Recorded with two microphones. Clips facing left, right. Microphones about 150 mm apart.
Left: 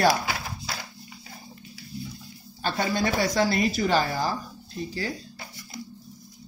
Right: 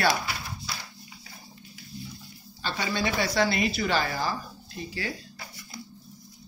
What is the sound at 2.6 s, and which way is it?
Speech, 50° left (ahead or behind).